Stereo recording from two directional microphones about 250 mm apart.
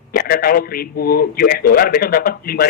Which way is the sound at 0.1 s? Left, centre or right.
Left.